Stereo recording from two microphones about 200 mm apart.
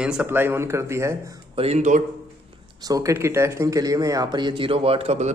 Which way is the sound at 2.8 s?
15° right (ahead or behind).